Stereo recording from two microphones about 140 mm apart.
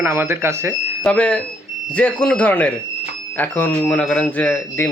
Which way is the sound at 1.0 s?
10° left (ahead or behind).